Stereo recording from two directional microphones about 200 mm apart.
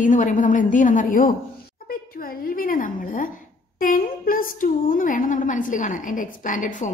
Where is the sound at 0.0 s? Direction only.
40° left (ahead or behind).